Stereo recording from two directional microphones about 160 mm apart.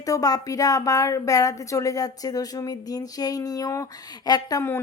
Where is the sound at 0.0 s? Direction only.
20° left (ahead or behind).